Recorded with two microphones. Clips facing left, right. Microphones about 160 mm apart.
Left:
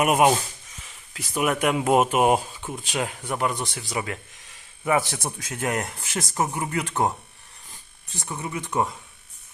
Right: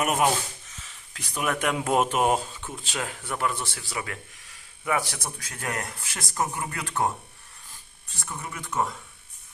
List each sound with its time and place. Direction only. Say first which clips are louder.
0.0 s speech: left 5 dB; 15° left (ahead or behind)
0.8 s a sound: left 4 dB; 5° left (ahead or behind)
1.4 s speech: left 4 dB; 10° left (ahead or behind)
8.2 s speech: left 5 dB; 20° left (ahead or behind)